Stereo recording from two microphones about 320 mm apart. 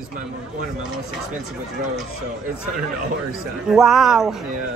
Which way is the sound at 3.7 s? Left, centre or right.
Centre.